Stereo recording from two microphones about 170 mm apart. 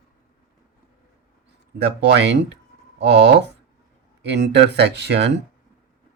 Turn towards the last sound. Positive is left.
turn(degrees=-90)